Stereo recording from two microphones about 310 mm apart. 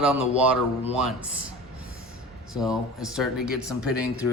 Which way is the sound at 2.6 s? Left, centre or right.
Centre.